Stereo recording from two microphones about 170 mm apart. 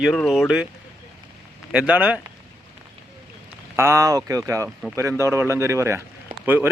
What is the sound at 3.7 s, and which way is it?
Speech, 15° right (ahead or behind).